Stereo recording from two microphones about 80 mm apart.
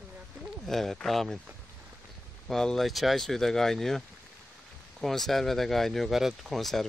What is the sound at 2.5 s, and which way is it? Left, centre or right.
Speech, centre.